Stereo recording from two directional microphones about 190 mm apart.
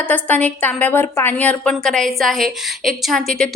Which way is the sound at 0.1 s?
10° left (ahead or behind).